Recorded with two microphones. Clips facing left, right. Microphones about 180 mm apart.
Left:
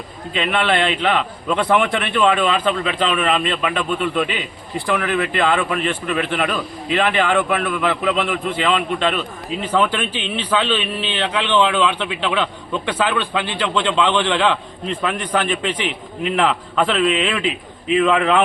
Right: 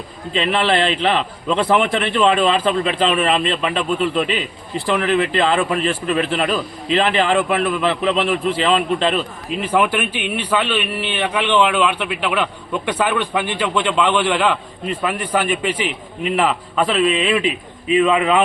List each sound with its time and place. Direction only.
0.3 s a man's voice: 30° right (ahead or behind)
9.6 s a man's voice: 10° right (ahead or behind)